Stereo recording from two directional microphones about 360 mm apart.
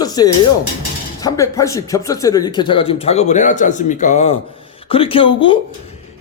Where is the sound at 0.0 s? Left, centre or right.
Centre.